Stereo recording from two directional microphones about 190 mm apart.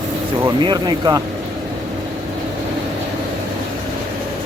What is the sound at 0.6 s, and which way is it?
Speech, 20° right (ahead or behind).